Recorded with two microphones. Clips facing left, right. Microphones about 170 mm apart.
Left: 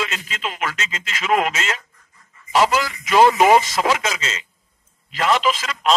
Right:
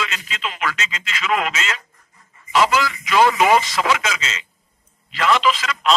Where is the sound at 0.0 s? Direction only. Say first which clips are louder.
Left 1 dB; 45° left (ahead or behind).